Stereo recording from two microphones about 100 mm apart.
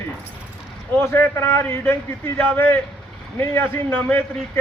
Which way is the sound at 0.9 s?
25° left (ahead or behind).